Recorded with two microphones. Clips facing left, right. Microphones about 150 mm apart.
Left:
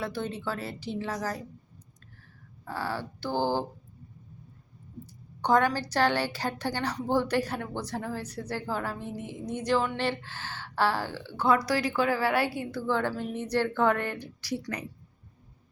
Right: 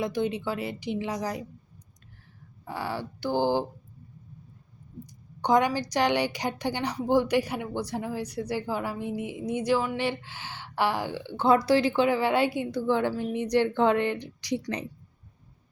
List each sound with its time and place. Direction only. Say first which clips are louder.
0.0 s a woman's voice: right 5 dB; 15° right (ahead or behind)
2.6 s a woman's voice: right 1 dB; 15° right (ahead or behind)
5.4 s a woman's voice: right 1 dB; 15° right (ahead or behind)
11.4 s a woman's voice: right 4 dB; 25° right (ahead or behind)